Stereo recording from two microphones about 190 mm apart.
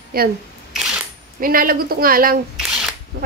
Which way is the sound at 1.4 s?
50° right (ahead or behind).